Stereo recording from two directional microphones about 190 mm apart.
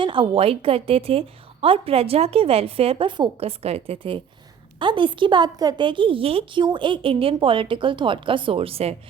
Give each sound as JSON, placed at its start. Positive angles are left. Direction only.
{"t": 0.0, "sound": "a woman's voice", "side_deg": -25}